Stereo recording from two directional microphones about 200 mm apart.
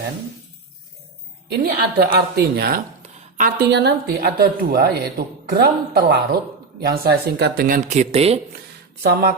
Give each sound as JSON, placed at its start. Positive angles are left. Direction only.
{"t": 1.5, "sound": "a woman's voice", "side_deg": -50}